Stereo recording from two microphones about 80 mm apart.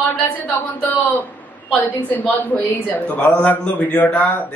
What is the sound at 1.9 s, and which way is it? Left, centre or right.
A man's voice, left.